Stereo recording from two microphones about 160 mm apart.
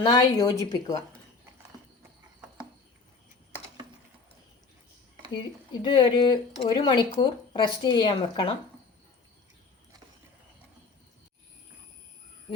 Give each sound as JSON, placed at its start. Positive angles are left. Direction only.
{"t": 0.0, "sound": "a woman's voice", "side_deg": 25}
{"t": 5.3, "sound": "a woman's voice", "side_deg": 30}